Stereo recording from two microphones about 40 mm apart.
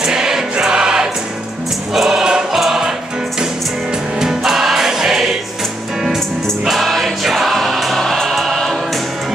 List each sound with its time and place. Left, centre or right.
0.0 s choir: centre
2.5 s music: centre
4.2 s music: centre
6.6 s music: centre